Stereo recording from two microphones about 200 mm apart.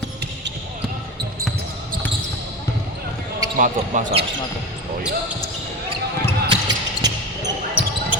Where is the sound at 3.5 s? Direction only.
40° right (ahead or behind).